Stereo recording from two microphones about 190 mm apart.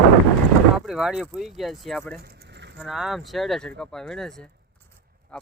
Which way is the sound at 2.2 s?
60° right (ahead or behind).